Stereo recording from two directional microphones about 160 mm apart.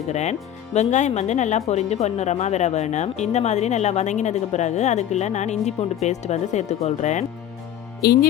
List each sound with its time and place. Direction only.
0.1 s speech: 45° left (ahead or behind)
8.0 s speech: 75° left (ahead or behind)